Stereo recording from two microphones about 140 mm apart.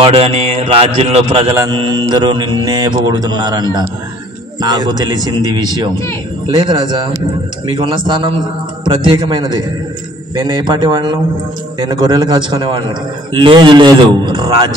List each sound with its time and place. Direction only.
0.0 s speech: 45° right (ahead or behind)
1.5 s a man's voice: 25° right (ahead or behind)